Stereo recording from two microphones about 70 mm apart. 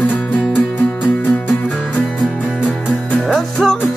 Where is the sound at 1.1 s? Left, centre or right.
Left.